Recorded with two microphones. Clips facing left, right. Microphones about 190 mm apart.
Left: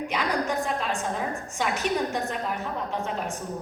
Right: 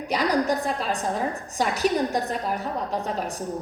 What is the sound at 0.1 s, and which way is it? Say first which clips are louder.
A woman's voice: right 7 dB; 35° right (ahead or behind).